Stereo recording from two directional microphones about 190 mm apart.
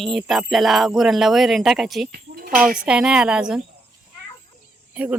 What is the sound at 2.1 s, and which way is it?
Speech, 50° right (ahead or behind).